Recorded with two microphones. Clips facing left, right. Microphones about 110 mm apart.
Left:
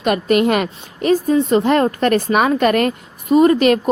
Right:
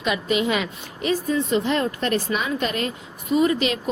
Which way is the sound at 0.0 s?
55° left (ahead or behind).